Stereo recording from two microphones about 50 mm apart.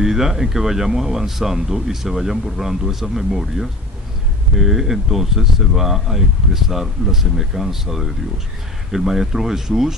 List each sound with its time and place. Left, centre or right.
0.0 s speech: centre